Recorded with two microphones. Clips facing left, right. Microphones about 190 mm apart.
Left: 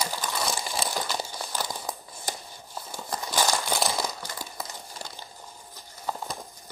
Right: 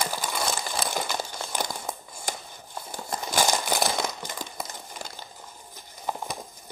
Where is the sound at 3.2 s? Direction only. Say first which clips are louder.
Right 1 dB; 15° right (ahead or behind).